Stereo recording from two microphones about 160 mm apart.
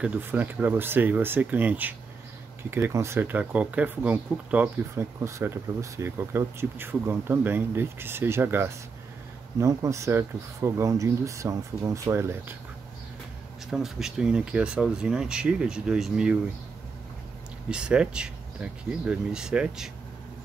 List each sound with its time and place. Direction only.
0.0 s speech: 10° right (ahead or behind)
13.7 s speech: 5° right (ahead or behind)
17.6 s speech: 5° right (ahead or behind)